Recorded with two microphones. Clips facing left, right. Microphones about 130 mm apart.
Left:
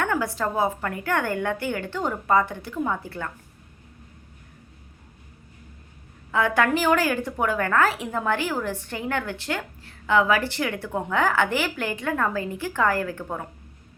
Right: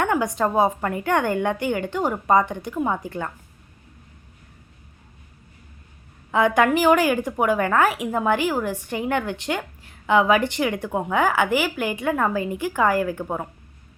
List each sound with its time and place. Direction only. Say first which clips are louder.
0.0 s a woman's voice: right 4 dB; 20° right (ahead or behind)
6.3 s a woman's voice: right 4 dB; 20° right (ahead or behind)